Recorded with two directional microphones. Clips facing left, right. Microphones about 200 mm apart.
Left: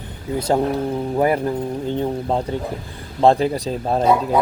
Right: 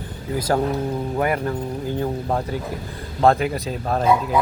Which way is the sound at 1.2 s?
30° left (ahead or behind).